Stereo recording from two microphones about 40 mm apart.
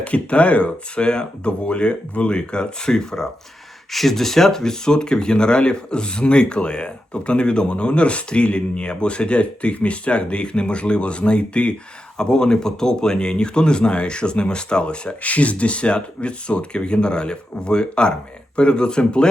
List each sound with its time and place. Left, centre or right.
0.0 s speech: left